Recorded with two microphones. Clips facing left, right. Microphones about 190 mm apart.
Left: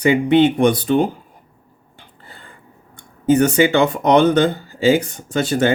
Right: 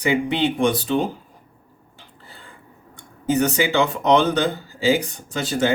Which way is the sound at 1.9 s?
60° left (ahead or behind).